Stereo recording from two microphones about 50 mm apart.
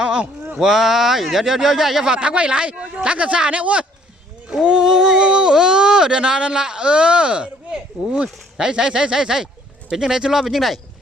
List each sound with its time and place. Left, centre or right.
0.0 s boat: centre
0.6 s speech: centre
10.4 s speech: centre